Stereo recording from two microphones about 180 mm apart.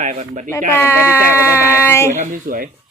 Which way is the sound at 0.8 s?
10° left (ahead or behind).